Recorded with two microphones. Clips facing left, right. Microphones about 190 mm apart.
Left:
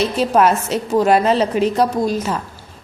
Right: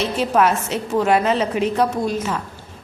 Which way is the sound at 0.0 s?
35° left (ahead or behind).